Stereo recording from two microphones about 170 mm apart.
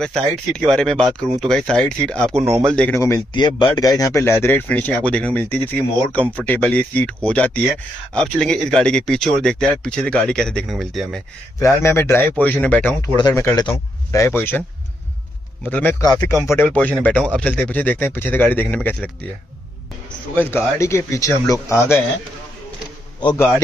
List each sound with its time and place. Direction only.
0.0 s speech: 5° left (ahead or behind)
3.0 s speech: 25° left (ahead or behind); by 11.2 s centre (ahead or behind)
11.6 s speech: 15° left (ahead or behind)
15.7 s speech: 10° left (ahead or behind)
20.3 s speech: 15° left (ahead or behind)